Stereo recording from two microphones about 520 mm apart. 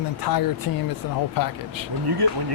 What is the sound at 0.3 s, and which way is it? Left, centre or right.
Speech, left.